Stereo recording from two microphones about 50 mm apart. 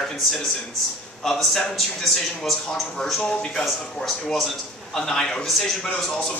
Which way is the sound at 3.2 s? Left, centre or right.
Centre.